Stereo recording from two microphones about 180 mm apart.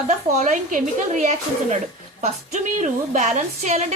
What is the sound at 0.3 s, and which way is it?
A woman's voice, 45° right (ahead or behind).